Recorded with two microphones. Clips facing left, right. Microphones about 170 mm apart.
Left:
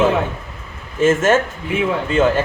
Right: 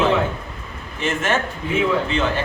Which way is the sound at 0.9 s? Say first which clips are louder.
Left 8 dB; 45° left (ahead or behind).